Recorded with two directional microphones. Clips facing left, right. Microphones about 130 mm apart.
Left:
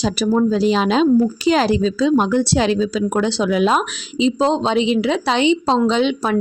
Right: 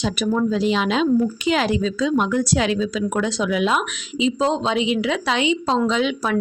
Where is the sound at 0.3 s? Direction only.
35° left (ahead or behind).